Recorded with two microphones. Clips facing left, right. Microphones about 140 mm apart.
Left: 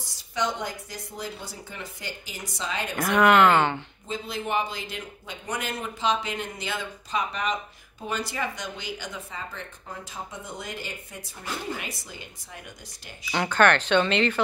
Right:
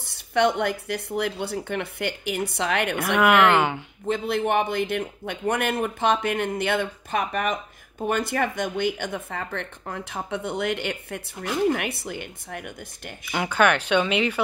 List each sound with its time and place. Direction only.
0.0 s speech: 60° right (ahead or behind)
3.2 s speech: 10° right (ahead or behind)
4.1 s speech: 60° right (ahead or behind)
13.3 s speech: 10° right (ahead or behind)